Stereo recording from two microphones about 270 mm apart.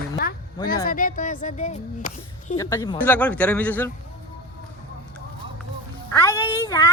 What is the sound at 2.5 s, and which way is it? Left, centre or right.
Speech, centre.